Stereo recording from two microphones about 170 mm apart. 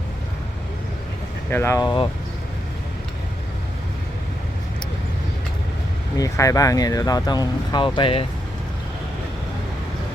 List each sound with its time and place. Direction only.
1.5 s speech: 15° left (ahead or behind)
6.1 s speech: 20° left (ahead or behind)